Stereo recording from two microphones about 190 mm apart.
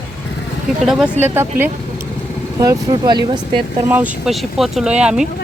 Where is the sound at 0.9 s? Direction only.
Centre (ahead or behind); by 3.8 s 25° right (ahead or behind).